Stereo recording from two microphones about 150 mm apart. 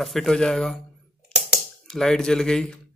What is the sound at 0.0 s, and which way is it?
Speech, centre (ahead or behind).